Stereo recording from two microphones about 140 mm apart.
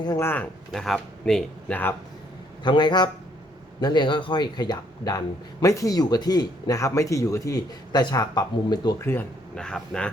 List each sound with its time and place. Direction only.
0.2 s speech: 15° left (ahead or behind)
0.7 s a man's voice: 5° left (ahead or behind)
2.6 s a man's voice: 35° left (ahead or behind)
9.0 s speech: 15° left (ahead or behind)
9.6 s a man's voice: 5° left (ahead or behind)